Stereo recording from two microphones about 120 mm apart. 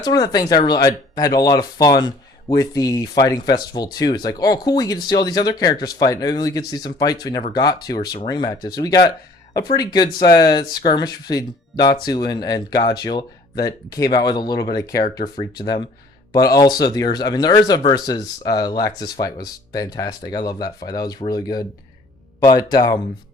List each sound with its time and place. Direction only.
0.0 s speech: 35° left (ahead or behind)